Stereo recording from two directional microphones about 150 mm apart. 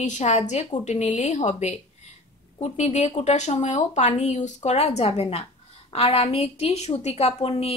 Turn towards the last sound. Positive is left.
turn(degrees=45)  # may be behind; listen again after turning